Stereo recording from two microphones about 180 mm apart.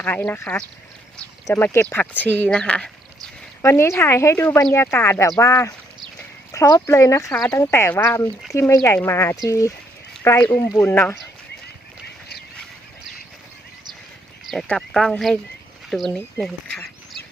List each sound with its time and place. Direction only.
0.0 s speech: 10° left (ahead or behind)
14.4 s speech: centre (ahead or behind)